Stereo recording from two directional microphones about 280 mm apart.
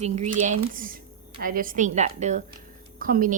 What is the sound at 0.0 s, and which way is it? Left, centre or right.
A woman's voice, right.